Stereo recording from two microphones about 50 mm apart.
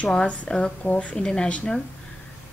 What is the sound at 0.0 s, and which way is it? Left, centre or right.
A woman's voice, left.